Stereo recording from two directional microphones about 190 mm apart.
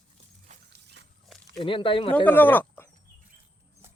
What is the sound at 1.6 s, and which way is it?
Speech, 25° left (ahead or behind).